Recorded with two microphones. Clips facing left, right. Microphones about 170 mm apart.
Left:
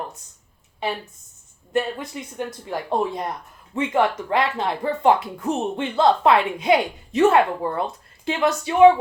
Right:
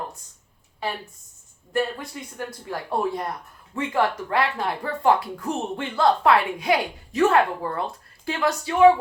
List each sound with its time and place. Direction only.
0.8 s speech: 20° left (ahead or behind)